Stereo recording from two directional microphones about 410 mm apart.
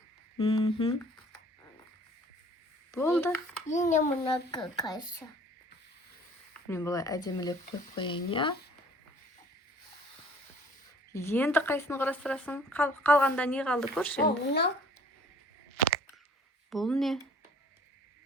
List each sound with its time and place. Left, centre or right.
0.3 s speech: centre
2.9 s a woman's voice: centre
3.7 s a child's voice: centre
6.5 s a child's voice: centre
11.1 s a woman's voice: centre
14.2 s speech: left
16.6 s a woman's voice: centre